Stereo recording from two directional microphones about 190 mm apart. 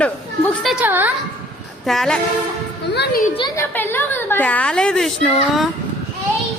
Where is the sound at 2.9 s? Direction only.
60° left (ahead or behind).